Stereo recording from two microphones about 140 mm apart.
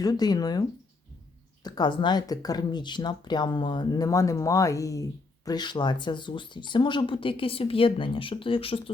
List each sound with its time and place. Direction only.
0.0 s speech: 30° left (ahead or behind)
1.6 s speech: 30° left (ahead or behind)